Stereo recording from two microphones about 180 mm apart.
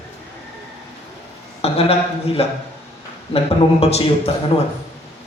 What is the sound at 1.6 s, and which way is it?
A man's voice, 35° left (ahead or behind).